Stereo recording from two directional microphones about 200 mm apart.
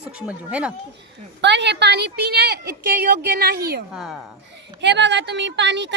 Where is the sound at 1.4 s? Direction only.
60° right (ahead or behind).